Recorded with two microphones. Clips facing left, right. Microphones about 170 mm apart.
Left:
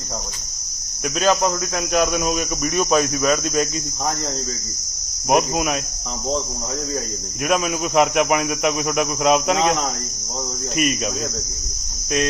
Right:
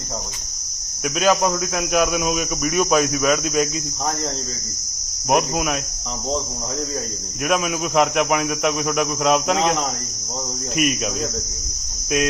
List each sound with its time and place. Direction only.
1.0 s cricket: 5° right (ahead or behind)
5.3 s cricket: centre (ahead or behind)
7.4 s cricket: centre (ahead or behind)
10.8 s cricket: centre (ahead or behind)